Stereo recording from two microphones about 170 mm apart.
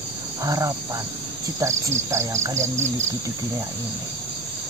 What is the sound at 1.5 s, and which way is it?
Insect, 15° right (ahead or behind).